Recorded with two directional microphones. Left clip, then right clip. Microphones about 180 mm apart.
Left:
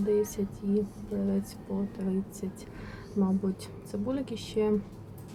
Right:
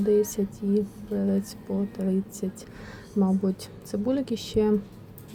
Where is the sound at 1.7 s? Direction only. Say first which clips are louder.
Right 5 dB; 20° right (ahead or behind).